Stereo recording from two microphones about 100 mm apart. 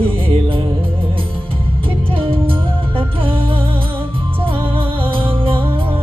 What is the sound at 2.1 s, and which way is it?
Music, 60° right (ahead or behind).